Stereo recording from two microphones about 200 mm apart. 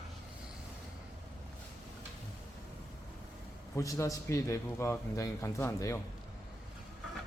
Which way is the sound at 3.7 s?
15° left (ahead or behind).